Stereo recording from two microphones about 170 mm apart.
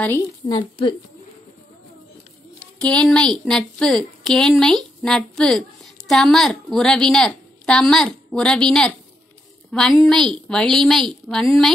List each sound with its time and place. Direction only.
0.0 s speech: 15° left (ahead or behind)
2.8 s a woman's voice: 5° left (ahead or behind)